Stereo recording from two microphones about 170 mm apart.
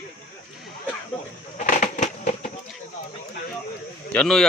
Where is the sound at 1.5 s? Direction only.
50° left (ahead or behind).